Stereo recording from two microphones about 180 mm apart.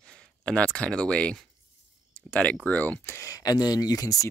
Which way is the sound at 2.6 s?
10° left (ahead or behind).